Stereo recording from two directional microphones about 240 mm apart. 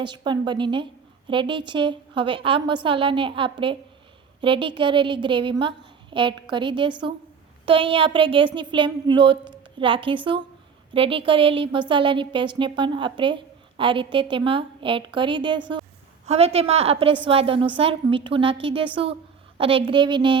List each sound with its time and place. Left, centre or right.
0.0 s a woman's voice: centre